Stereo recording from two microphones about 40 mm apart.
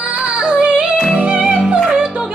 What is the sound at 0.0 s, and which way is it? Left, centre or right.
Yodeling, right.